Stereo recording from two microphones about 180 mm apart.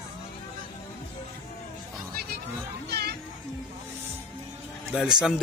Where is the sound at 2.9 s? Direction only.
65° right (ahead or behind).